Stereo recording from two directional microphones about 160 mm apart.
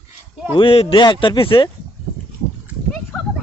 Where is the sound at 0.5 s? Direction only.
35° left (ahead or behind).